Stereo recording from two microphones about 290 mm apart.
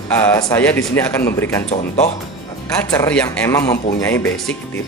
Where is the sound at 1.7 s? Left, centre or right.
Left.